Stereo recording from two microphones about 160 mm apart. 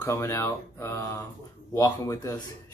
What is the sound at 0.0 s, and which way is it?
Speech, 20° left (ahead or behind).